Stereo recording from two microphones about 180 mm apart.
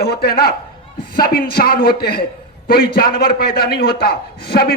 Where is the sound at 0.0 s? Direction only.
60° left (ahead or behind).